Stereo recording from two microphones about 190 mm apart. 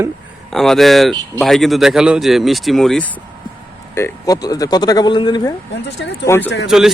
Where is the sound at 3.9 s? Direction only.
15° left (ahead or behind).